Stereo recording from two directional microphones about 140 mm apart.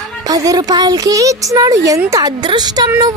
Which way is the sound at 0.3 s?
25° right (ahead or behind).